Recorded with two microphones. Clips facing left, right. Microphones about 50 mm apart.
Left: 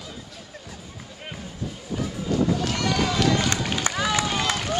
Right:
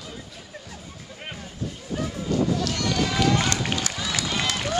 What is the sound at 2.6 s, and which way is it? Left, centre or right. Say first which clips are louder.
Run: left 1 dB; centre.